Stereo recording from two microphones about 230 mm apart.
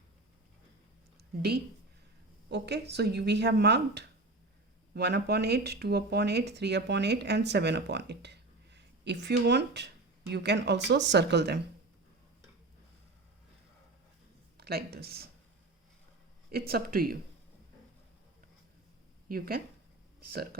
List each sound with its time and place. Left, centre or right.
1.4 s speech: right
14.6 s speech: right
16.5 s speech: right
19.3 s speech: right